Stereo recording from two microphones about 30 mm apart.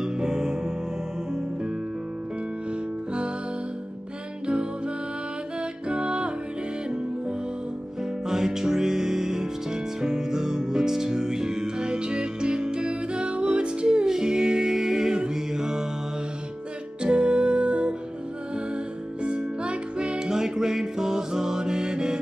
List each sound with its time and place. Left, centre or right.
0.0 s music: right
4.5 s music: right
8.3 s music: centre; by 14.0 s right
14.0 s music: centre
17.0 s music: right
19.2 s music: right
20.1 s music: centre